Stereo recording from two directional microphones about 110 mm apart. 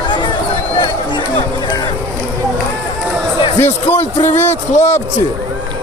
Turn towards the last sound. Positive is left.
turn(degrees=20)  # may be behind; listen again after turning